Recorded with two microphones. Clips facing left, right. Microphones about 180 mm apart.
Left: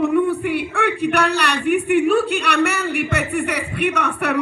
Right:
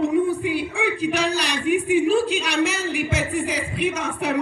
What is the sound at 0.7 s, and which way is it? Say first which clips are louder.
A man's voice: left 3 dB; 65° left (ahead or behind).